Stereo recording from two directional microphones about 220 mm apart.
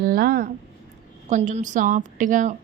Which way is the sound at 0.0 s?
40° right (ahead or behind).